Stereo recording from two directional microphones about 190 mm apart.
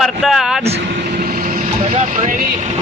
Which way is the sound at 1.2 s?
50° right (ahead or behind).